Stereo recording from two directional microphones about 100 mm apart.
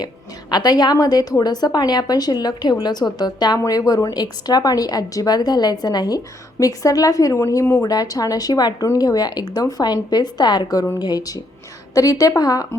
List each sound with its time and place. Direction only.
0.5 s a woman's voice: 40° left (ahead or behind)